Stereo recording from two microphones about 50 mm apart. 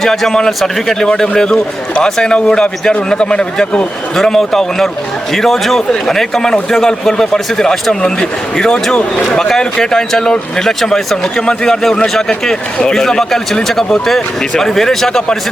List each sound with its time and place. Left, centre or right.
0.0 s a man's voice: centre
4.2 s a man's voice: centre